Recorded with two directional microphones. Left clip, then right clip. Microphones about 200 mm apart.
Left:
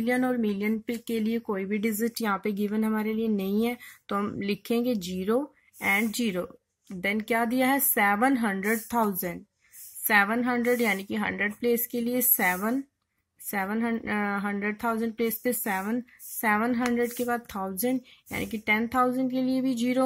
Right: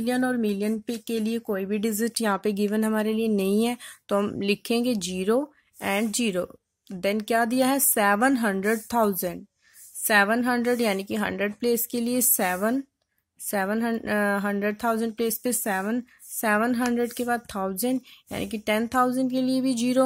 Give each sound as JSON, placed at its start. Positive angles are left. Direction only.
{"t": 0.0, "sound": "speech", "side_deg": -40}